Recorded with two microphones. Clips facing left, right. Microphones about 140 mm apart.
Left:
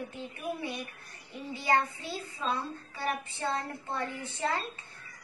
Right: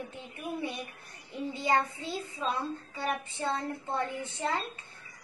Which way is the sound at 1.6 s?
20° right (ahead or behind).